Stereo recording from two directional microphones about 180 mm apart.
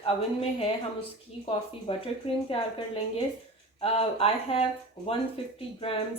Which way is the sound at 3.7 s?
35° left (ahead or behind).